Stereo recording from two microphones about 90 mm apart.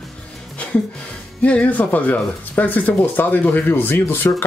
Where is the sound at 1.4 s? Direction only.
15° left (ahead or behind).